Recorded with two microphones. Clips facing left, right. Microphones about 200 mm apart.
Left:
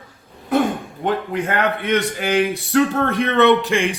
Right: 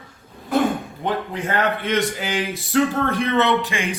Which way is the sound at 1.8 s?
60° left (ahead or behind).